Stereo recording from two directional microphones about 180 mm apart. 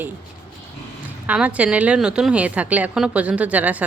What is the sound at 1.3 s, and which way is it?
A woman's voice, 10° right (ahead or behind).